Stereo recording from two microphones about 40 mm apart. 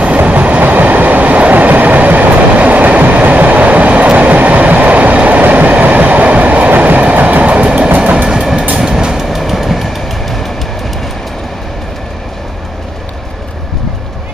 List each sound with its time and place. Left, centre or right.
0.2 s train: right
7.5 s train: right
8.3 s train: centre